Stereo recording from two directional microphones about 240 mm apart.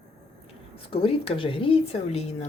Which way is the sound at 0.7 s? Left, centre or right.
Left.